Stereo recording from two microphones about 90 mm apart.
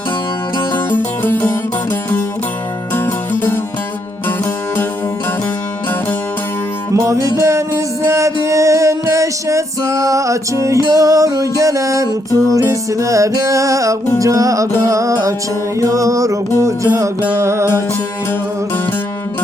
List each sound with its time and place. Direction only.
0.7 s music: 20° left (ahead or behind)
2.9 s music: 25° left (ahead or behind)
6.9 s music: 35° right (ahead or behind)